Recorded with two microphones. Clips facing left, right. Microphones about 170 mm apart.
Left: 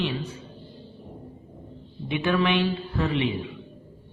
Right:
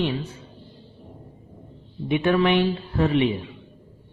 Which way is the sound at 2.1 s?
35° right (ahead or behind).